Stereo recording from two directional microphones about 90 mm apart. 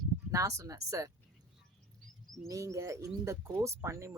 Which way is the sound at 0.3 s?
35° right (ahead or behind).